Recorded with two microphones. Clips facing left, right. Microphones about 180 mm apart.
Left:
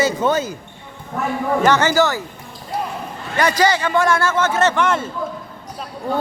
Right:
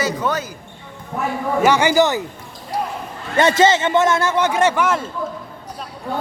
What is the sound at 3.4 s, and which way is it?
Speech, 25° right (ahead or behind).